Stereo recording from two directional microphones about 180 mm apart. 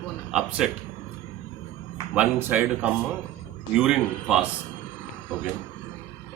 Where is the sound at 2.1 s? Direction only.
5° right (ahead or behind).